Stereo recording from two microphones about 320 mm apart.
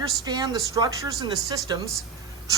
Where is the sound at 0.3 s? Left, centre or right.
Centre.